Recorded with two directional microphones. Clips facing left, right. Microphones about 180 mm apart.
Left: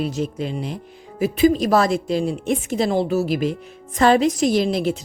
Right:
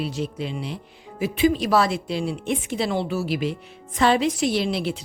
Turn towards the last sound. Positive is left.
turn(degrees=45)  # may be behind; listen again after turning